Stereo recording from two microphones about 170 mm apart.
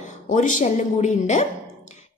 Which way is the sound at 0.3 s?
50° left (ahead or behind).